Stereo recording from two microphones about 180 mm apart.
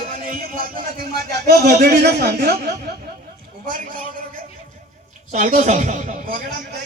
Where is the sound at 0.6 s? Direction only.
50° right (ahead or behind).